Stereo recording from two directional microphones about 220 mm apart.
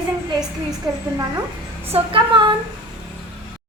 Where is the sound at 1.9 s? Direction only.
25° right (ahead or behind).